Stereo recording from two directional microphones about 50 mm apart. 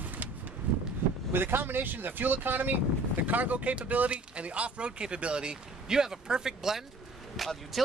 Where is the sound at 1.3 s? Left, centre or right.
Right.